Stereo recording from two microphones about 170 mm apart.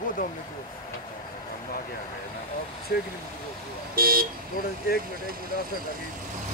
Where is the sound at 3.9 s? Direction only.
60° right (ahead or behind).